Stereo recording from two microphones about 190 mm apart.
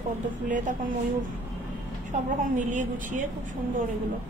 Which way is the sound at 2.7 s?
40° right (ahead or behind).